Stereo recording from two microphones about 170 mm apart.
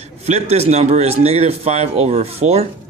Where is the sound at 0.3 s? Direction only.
40° right (ahead or behind).